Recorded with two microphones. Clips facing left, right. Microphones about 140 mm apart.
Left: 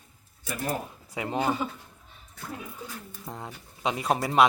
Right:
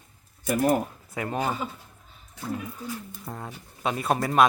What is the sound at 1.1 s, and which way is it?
Speech, 20° left (ahead or behind).